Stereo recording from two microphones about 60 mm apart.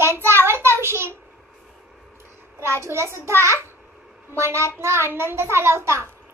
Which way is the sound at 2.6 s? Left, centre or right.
Right.